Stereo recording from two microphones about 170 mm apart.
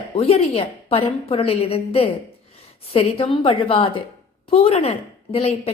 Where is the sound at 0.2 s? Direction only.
35° left (ahead or behind).